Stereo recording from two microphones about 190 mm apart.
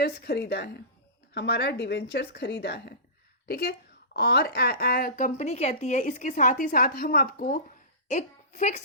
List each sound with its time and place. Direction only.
0.0 s a woman's voice: 60° left (ahead or behind); by 8.8 s 40° left (ahead or behind)